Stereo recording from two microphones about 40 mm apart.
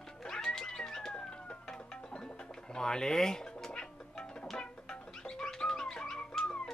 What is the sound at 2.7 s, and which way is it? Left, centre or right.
Music, centre.